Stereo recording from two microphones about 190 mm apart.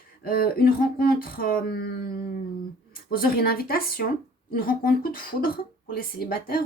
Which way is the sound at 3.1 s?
50° left (ahead or behind).